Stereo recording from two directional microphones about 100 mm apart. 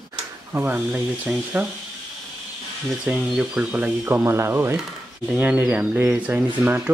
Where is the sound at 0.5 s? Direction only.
25° right (ahead or behind).